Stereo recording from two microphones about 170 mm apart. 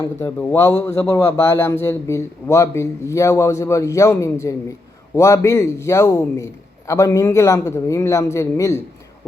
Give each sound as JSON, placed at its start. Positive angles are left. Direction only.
{"t": 0.0, "sound": "a man's voice", "side_deg": 15}